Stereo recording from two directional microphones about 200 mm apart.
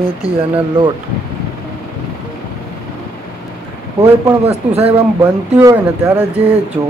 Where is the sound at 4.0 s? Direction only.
15° right (ahead or behind).